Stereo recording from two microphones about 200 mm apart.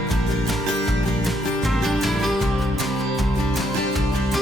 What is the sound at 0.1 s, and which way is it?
Music, centre (ahead or behind).